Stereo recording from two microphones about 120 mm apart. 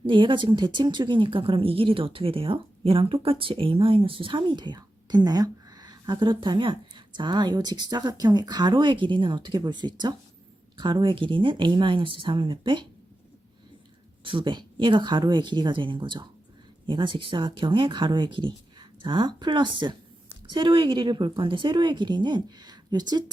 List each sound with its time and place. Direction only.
0.0 s a woman's voice: 45° right (ahead or behind)
14.3 s a woman's voice: 45° right (ahead or behind)